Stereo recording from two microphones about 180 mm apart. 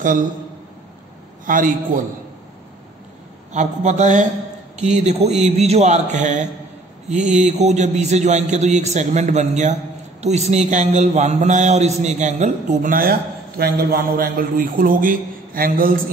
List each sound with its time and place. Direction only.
1.4 s a man's voice: 50° right (ahead or behind)
3.5 s a man's voice: 40° right (ahead or behind)